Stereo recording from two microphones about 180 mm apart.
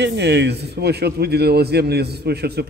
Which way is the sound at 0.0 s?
70° right (ahead or behind).